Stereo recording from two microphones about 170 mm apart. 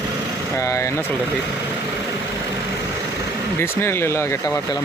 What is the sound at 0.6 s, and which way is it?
Speech, 15° left (ahead or behind).